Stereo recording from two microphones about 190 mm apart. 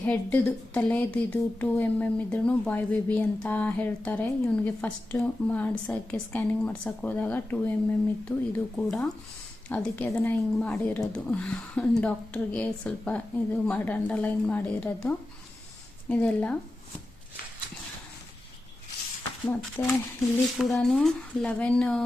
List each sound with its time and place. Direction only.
0.0 s a woman's voice: 5° left (ahead or behind)
19.8 s a woman's voice: 10° left (ahead or behind)
20.6 s speech: centre (ahead or behind)